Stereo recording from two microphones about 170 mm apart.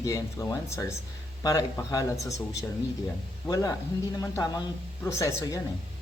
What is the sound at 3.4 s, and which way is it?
Speech, 20° left (ahead or behind).